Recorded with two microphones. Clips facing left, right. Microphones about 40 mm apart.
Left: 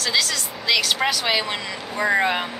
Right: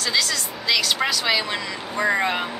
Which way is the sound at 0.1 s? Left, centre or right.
Centre.